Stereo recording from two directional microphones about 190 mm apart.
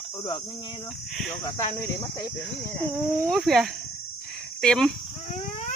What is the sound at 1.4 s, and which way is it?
Speech, 15° left (ahead or behind).